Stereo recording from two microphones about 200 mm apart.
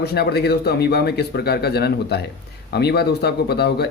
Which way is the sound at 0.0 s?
55° left (ahead or behind).